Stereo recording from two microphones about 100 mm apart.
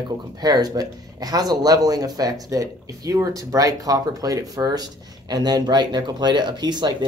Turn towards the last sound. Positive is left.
turn(degrees=-45)  # may be behind; listen again after turning